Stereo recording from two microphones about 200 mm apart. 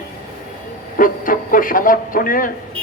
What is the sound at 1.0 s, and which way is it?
A man's voice, 45° left (ahead or behind).